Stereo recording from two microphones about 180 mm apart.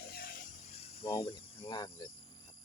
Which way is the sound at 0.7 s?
35° left (ahead or behind).